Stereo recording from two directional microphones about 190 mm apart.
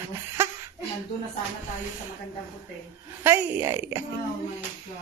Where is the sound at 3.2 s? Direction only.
15° right (ahead or behind).